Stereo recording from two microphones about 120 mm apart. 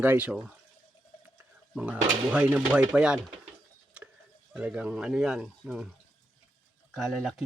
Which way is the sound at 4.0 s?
10° right (ahead or behind).